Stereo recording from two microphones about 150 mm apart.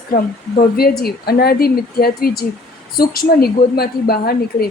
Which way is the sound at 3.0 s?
80° left.